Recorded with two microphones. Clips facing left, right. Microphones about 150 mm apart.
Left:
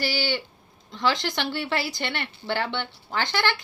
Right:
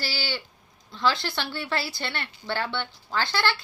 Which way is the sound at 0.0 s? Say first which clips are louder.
Left 5 dB; 15° left (ahead or behind).